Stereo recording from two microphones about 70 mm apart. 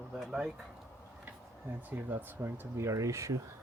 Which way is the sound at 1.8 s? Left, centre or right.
Right.